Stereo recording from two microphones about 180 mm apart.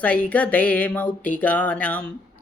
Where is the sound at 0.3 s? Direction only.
10° left (ahead or behind).